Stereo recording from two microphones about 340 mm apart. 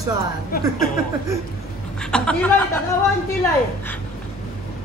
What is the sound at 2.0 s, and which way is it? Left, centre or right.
Speech, centre.